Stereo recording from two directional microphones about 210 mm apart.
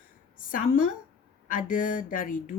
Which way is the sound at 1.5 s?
40° left (ahead or behind).